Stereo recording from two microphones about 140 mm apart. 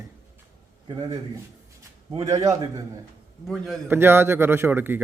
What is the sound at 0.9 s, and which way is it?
Speech, 30° right (ahead or behind).